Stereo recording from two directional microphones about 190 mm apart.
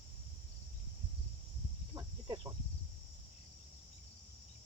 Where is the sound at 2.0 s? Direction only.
20° right (ahead or behind).